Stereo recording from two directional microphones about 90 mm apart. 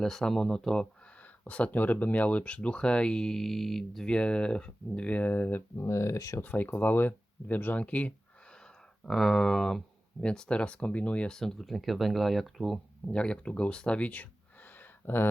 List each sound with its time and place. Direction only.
0.0 s speech: 5° left (ahead or behind); by 6.4 s 35° left (ahead or behind)
6.4 s speech: 20° left (ahead or behind)
9.0 s speech: 5° left (ahead or behind)
13.1 s speech: 10° left (ahead or behind)
14.8 s a sound: 25° left (ahead or behind)